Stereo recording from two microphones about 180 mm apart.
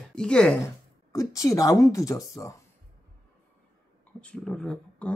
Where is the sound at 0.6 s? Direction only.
20° left (ahead or behind).